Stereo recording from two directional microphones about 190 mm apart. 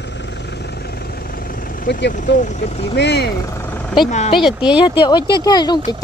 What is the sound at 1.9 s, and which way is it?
Speech, 65° left (ahead or behind).